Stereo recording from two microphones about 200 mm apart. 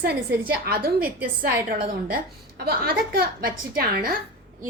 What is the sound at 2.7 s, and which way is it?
A woman's voice, 50° right (ahead or behind).